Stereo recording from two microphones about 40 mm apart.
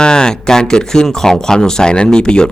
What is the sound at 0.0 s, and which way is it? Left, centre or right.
Speech, centre.